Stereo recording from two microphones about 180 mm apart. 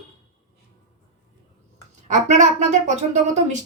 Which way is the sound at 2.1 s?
40° right (ahead or behind).